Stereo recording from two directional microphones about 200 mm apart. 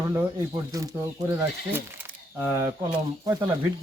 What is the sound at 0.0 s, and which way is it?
Speech, 15° right (ahead or behind).